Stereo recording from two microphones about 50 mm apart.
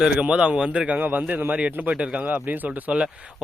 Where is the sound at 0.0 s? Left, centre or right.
Centre.